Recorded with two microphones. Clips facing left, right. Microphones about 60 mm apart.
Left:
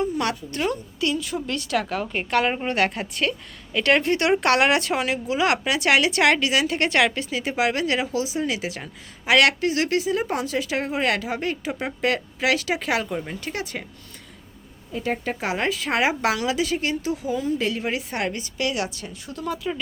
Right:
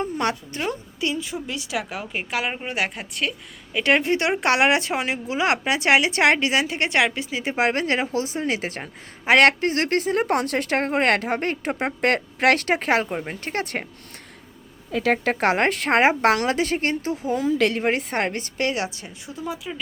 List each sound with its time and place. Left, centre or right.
0.0 s a woman's voice: right; by 3.8 s centre
3.8 s a woman's voice: centre; by 13.8 s right
14.9 s a woman's voice: right
15.9 s a woman's voice: right
17.3 s a woman's voice: right; by 19.5 s centre